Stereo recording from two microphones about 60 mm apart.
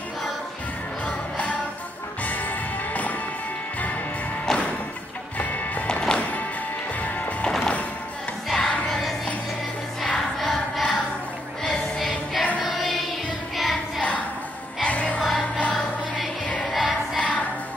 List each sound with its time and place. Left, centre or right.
1.0 s music: left
4.5 s music: centre
5.4 s music: left
5.9 s music: centre
7.0 s music: left
8.5 s music: centre
10.0 s choir: centre
10.5 s a sound: centre
11.6 s choir: centre
12.6 s child singing: centre
14.8 s music: left
15.2 s music: centre
16.7 s music: centre